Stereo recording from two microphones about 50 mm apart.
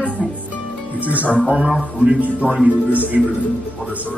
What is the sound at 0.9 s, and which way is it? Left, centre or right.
Speech, right.